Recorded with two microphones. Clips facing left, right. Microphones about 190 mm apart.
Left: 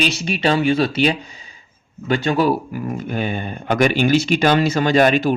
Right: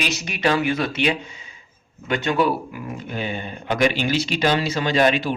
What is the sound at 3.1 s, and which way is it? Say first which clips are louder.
Speech: left 2 dB; 50° left (ahead or behind).